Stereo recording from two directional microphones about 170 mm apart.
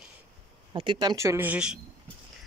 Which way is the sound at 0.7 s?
30° right (ahead or behind).